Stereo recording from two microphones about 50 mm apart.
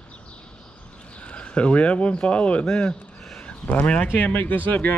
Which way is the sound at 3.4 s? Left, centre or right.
Left.